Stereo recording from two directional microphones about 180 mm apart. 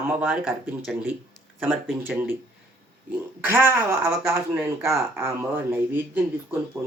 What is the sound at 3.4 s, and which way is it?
Speech, 10° right (ahead or behind).